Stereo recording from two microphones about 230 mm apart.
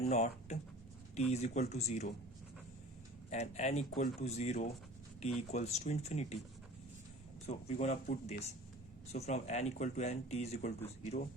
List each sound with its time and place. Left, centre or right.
0.0 s speech: left
3.2 s speech: left
7.4 s speech: left